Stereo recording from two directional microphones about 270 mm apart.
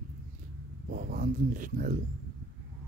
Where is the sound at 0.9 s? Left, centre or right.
Right.